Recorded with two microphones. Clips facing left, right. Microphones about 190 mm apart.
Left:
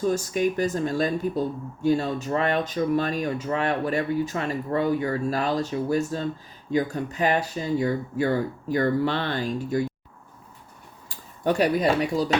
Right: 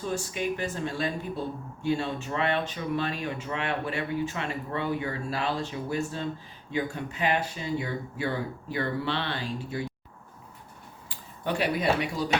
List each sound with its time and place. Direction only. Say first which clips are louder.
0.0 s speech: left 7 dB; 40° left (ahead or behind)
11.1 s speech: left 7 dB; 45° left (ahead or behind)